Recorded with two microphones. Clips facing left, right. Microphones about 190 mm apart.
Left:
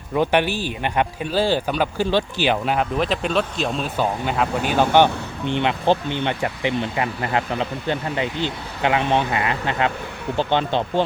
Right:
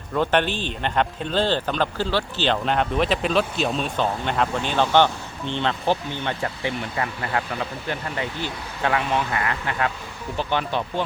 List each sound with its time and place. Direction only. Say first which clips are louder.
0.1 s speech: left 2 dB; 15° left (ahead or behind)